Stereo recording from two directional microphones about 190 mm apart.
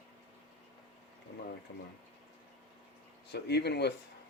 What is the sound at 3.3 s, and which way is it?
Speech, 60° left (ahead or behind).